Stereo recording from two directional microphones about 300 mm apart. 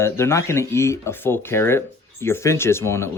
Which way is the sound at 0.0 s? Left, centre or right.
Centre.